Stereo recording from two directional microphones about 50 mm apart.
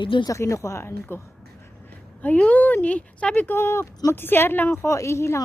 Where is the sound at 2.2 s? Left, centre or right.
Left.